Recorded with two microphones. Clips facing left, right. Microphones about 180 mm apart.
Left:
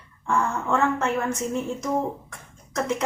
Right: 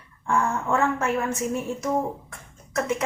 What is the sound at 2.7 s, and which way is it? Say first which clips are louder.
Speech: even; 5° right (ahead or behind).